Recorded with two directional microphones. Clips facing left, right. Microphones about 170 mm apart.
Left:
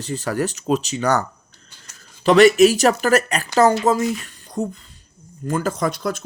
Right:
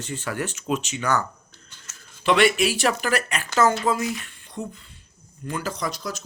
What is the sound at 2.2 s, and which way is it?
Speech, 40° left (ahead or behind).